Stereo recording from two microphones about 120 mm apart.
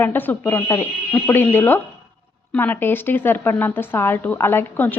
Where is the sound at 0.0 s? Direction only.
15° left (ahead or behind).